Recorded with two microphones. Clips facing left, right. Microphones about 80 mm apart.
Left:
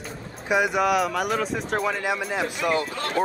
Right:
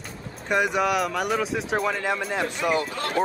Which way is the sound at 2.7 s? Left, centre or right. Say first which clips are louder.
Even; right.